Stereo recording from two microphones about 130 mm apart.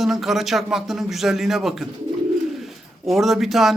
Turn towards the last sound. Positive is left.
turn(degrees=0)  # may be behind; listen again after turning